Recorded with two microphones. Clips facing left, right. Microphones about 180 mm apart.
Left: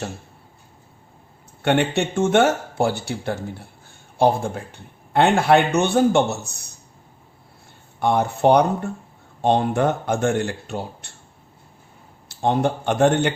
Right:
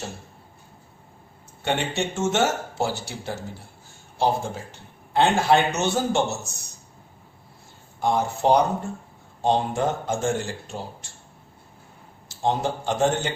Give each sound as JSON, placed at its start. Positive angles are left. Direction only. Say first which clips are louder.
{"t": 1.6, "sound": "a man's voice", "louder": "left 6 dB", "side_deg": 60}
{"t": 7.9, "sound": "a man's voice", "louder": "left 3 dB", "side_deg": 60}
{"t": 12.3, "sound": "a man's voice", "louder": "left 4 dB", "side_deg": 60}